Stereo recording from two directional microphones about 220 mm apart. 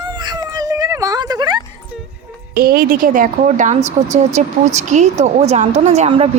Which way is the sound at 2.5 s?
45° right (ahead or behind).